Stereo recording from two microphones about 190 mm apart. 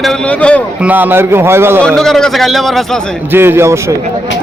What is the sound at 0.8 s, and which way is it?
Speech, 10° right (ahead or behind).